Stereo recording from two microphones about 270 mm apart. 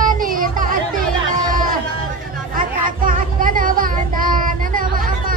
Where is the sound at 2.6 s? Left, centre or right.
Right.